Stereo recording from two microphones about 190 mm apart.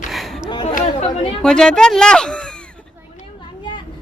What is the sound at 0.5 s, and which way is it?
Chatter, 25° left (ahead or behind).